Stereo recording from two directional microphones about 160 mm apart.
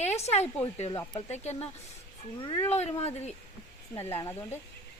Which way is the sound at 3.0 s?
40° left (ahead or behind).